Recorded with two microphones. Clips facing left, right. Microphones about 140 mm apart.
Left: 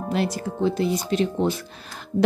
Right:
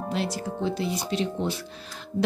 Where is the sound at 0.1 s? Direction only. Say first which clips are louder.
Left 5 dB; 50° left (ahead or behind).